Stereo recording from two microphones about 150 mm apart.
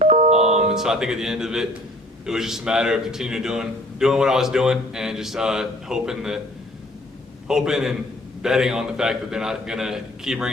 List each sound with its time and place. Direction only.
0.0 s music: 45° right (ahead or behind)
0.3 s a man's voice: 5° right (ahead or behind)
7.4 s a man's voice: 5° right (ahead or behind)